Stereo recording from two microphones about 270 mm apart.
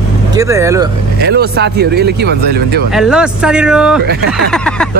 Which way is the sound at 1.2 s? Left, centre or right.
Right.